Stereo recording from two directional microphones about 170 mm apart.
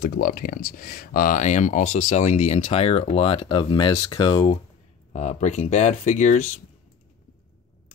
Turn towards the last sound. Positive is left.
turn(degrees=45)  # may be behind; listen again after turning